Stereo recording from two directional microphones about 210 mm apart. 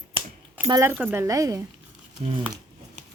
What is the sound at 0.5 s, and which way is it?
Speech, 15° right (ahead or behind).